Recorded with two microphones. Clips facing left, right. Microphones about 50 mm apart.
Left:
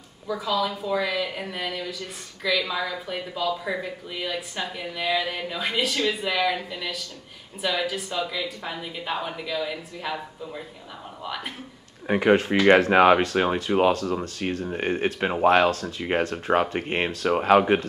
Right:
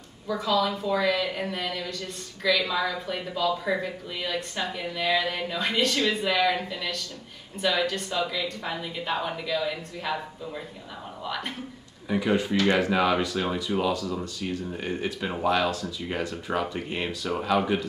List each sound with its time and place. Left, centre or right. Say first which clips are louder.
0.3 s a woman's voice: right 1 dB; centre
12.1 s speech: left 5 dB; left